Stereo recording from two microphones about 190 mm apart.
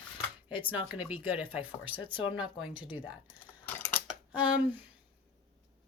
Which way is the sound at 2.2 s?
25° left (ahead or behind).